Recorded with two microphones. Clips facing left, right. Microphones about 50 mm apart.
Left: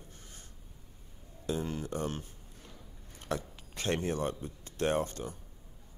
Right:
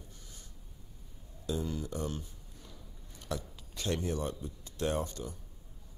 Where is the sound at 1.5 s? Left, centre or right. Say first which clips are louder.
Left 1 dB; left.